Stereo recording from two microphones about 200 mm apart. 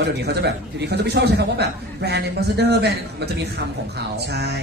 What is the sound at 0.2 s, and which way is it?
A man's voice, 55° right (ahead or behind).